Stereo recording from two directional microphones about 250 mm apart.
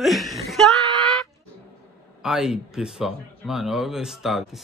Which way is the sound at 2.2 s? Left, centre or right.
Centre.